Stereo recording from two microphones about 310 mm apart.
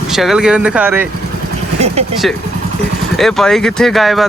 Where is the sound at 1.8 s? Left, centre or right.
Right.